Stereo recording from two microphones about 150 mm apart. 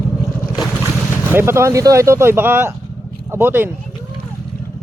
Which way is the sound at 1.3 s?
15° right (ahead or behind).